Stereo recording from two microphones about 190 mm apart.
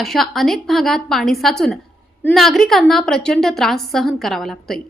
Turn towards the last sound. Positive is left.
turn(degrees=0)  # may be behind; listen again after turning